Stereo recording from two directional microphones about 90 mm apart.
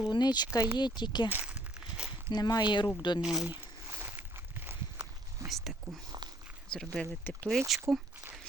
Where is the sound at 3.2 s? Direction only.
5° right (ahead or behind).